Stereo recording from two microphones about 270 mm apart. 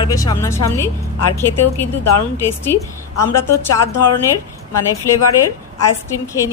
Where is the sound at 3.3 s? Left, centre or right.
Left.